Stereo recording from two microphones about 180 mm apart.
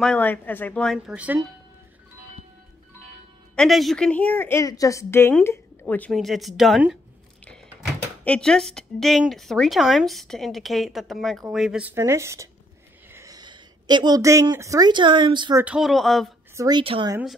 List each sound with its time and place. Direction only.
0.0 s a woman's voice: 5° left (ahead or behind)
0.9 s speech: 5° right (ahead or behind)
3.5 s a woman's voice: centre (ahead or behind)
8.2 s speech: 5° left (ahead or behind); by 15.5 s 25° right (ahead or behind)
15.5 s speech: 5° right (ahead or behind)
16.5 s a woman's voice: 25° right (ahead or behind)